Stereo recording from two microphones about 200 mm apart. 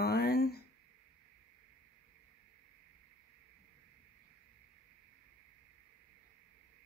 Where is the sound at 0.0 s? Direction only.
55° left (ahead or behind).